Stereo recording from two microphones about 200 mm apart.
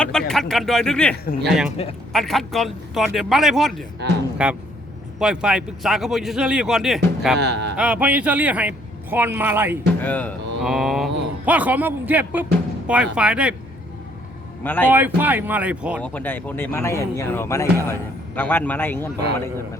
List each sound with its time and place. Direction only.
0.0 s speech: 5° left (ahead or behind)
1.1 s speech: 50° left (ahead or behind)
1.5 s speech: 5° right (ahead or behind)
1.7 s speech: 30° left (ahead or behind)
2.1 s speech: centre (ahead or behind)
7.3 s speech: 60° right (ahead or behind)
7.8 s a man's voice: 5° right (ahead or behind)
10.0 s a man's voice: 10° left (ahead or behind)
14.6 s a man's voice: 10° left (ahead or behind)
14.8 s a man's voice: 10° right (ahead or behind)
16.0 s speech: 5° left (ahead or behind)